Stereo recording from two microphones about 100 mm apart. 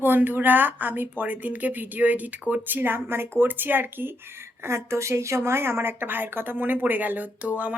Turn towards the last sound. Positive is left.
turn(degrees=-15)  # may be behind; listen again after turning